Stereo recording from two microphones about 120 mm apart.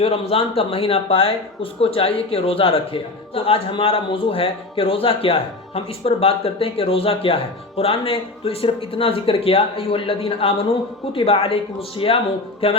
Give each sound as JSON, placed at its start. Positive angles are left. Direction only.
{"t": 0.0, "sound": "speech", "side_deg": 55}